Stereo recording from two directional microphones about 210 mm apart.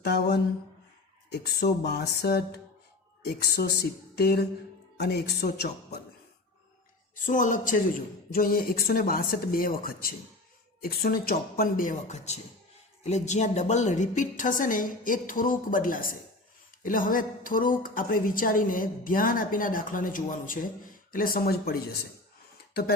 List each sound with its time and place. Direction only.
0.0 s speech: 50° left (ahead or behind)
7.3 s a woman's voice: 35° left (ahead or behind)